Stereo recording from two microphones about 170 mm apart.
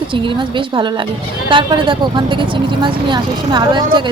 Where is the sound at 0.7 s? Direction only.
30° right (ahead or behind).